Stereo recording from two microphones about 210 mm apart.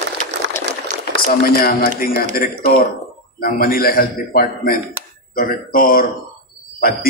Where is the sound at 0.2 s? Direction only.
40° right (ahead or behind).